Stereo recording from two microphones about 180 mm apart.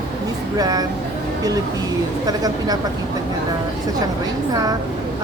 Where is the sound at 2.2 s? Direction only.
20° right (ahead or behind).